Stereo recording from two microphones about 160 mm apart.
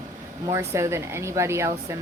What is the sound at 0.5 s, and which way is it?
Speech, 15° right (ahead or behind).